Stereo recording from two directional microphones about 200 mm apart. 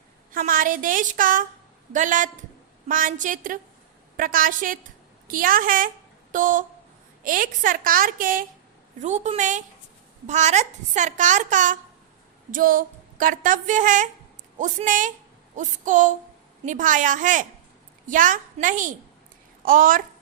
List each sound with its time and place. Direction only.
0.3 s a woman's voice: 45° right (ahead or behind)